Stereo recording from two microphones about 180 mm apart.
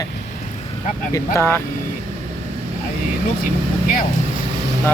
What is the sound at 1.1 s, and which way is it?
Speech, 15° left (ahead or behind).